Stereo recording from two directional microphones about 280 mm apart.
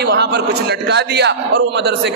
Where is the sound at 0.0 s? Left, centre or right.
Right.